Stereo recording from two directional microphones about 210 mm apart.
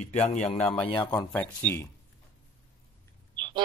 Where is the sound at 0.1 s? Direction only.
35° left (ahead or behind).